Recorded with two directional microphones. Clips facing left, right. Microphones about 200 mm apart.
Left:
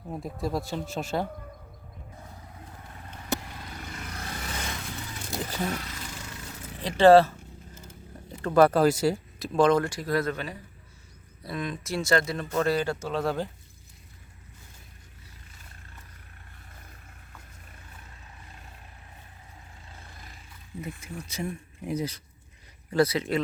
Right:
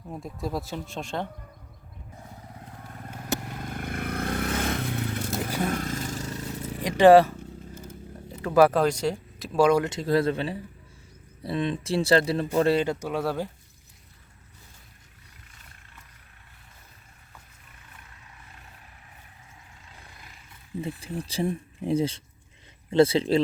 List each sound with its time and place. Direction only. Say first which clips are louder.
0.4 s speech: left 1 dB; centre (ahead or behind)
3.3 s vehicle: right 2 dB; 50° right (ahead or behind)
5.6 s a sound: right 5 dB; 50° right (ahead or behind)
6.8 s speech: right 1 dB; 15° right (ahead or behind)
9.9 s speech: right 4 dB; 25° right (ahead or behind); by 13.5 s 5° right (ahead or behind)
20.8 s speech: right 5 dB; 30° right (ahead or behind)